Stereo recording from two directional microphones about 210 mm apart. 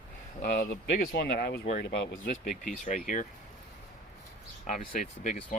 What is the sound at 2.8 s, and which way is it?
Speech, 35° left (ahead or behind).